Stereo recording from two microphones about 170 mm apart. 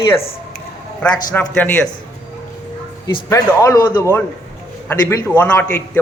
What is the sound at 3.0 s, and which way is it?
A man's voice, 20° left (ahead or behind).